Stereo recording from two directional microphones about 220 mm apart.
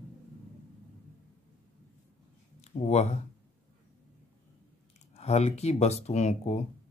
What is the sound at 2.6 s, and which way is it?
Speech, 30° left (ahead or behind).